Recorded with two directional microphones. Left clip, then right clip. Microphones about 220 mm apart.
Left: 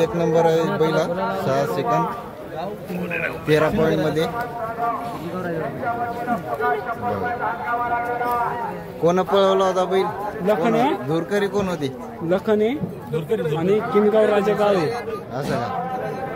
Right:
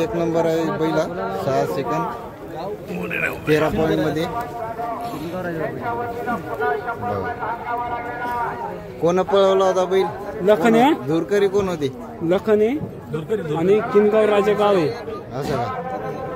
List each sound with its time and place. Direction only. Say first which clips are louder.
0.0 s a man's voice: left 2 dB; 5° right (ahead or behind)
3.1 s speech: right 2 dB; 45° right (ahead or behind)
3.4 s a man's voice: left 1 dB; 5° right (ahead or behind)
9.0 s a man's voice: right 1 dB; 10° right (ahead or behind)
10.4 s speech: right 4 dB; 50° right (ahead or behind)
11.1 s a man's voice: right 3 dB; 10° right (ahead or behind)
12.3 s speech: right 2 dB; 35° right (ahead or behind)